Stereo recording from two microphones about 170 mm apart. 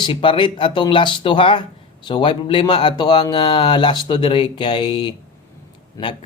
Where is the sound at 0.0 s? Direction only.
30° left (ahead or behind).